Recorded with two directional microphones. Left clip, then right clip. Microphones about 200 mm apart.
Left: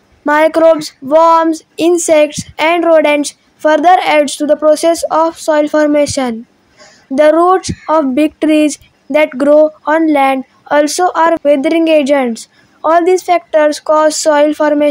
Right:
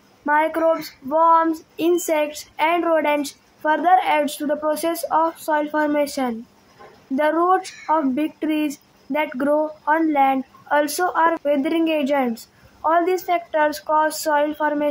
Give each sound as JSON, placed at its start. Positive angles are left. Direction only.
{"t": 0.2, "sound": "speech", "side_deg": 40}